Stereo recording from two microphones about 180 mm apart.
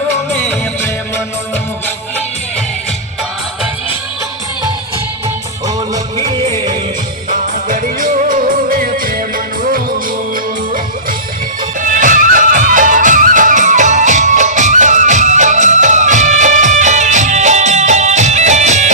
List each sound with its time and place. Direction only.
5.6 s music: 20° right (ahead or behind)
7.3 s music: 50° right (ahead or behind)
11.8 s music: 45° right (ahead or behind)